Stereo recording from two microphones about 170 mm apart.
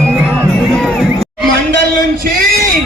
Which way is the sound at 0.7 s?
5° left (ahead or behind).